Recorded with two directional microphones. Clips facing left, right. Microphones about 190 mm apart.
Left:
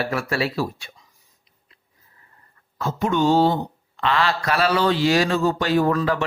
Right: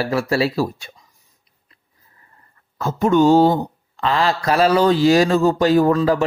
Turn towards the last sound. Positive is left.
turn(degrees=-35)  # may be behind; listen again after turning